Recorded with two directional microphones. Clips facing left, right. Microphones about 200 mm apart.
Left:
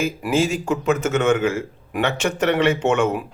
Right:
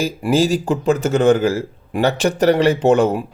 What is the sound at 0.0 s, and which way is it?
A man's voice, 35° right (ahead or behind).